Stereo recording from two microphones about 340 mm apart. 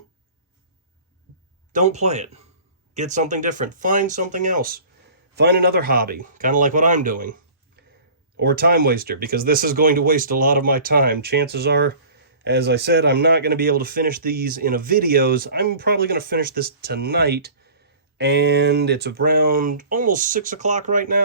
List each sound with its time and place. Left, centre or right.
1.7 s speech: centre
7.8 s a sound: right
8.4 s speech: right